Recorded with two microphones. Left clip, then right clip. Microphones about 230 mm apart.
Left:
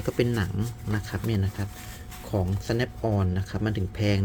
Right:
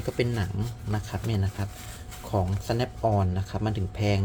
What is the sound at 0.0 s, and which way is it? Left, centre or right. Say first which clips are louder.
Speech: left 2 dB; centre.